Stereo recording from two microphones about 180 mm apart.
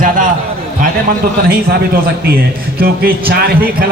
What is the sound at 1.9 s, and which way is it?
A man's voice, 55° right (ahead or behind).